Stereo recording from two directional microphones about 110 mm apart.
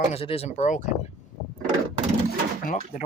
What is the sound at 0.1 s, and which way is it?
Speech, 65° left (ahead or behind).